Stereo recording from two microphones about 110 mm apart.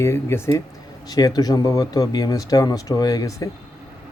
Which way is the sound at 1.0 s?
35° left (ahead or behind).